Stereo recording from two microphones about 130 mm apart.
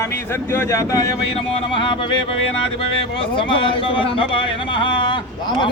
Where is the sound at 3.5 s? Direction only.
40° left (ahead or behind).